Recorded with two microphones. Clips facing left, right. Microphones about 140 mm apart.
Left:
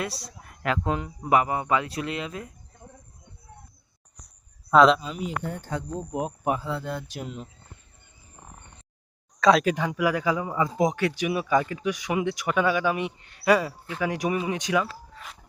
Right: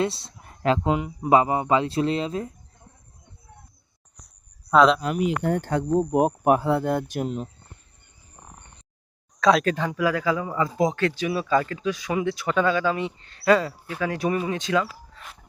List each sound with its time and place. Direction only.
0.0 s speech: 25° right (ahead or behind)
0.9 s speech: 15° right (ahead or behind)
4.2 s a sound: centre (ahead or behind)
4.7 s speech: centre (ahead or behind)
5.0 s speech: 70° right (ahead or behind); by 7.5 s 40° right (ahead or behind)
9.4 s speech: centre (ahead or behind)
9.6 s a man's voice: 15° left (ahead or behind)